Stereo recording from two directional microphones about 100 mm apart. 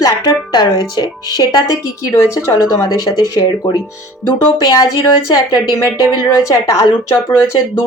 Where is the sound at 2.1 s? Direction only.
30° left (ahead or behind).